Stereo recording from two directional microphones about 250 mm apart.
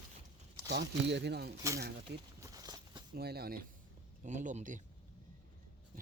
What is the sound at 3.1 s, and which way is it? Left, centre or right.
Speech, right.